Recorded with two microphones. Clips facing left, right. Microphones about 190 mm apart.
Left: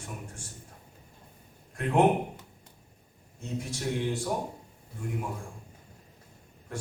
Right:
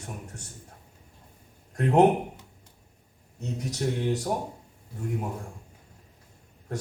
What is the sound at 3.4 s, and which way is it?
Speech, 40° right (ahead or behind).